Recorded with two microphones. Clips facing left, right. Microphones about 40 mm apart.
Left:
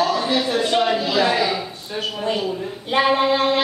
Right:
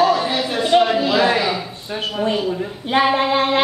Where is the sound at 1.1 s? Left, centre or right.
Centre.